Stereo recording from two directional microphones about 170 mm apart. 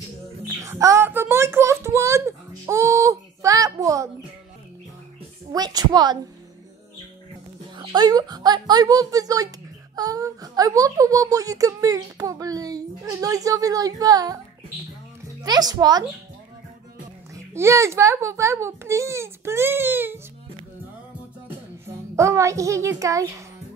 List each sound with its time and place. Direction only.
0.6 s a sound: 20° right (ahead or behind)
5.5 s a woman's voice: 20° right (ahead or behind)
7.7 s a woman's voice: 25° right (ahead or behind)
15.4 s a woman's voice: 25° right (ahead or behind)
17.6 s a child's voice: 15° right (ahead or behind)
21.8 s a child's voice: 15° right (ahead or behind)